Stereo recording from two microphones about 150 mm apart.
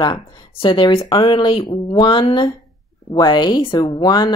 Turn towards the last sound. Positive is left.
turn(degrees=25)  # may be behind; listen again after turning